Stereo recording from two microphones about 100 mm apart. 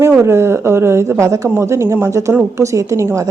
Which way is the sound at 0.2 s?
25° right (ahead or behind).